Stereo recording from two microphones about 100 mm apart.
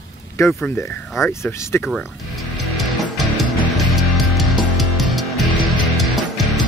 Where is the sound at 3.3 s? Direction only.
Centre (ahead or behind).